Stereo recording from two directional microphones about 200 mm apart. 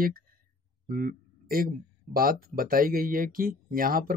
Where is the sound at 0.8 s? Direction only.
45° right (ahead or behind).